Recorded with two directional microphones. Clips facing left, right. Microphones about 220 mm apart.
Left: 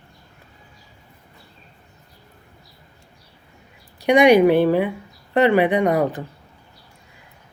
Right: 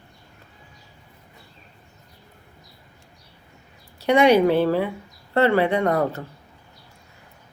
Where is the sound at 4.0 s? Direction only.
15° left (ahead or behind).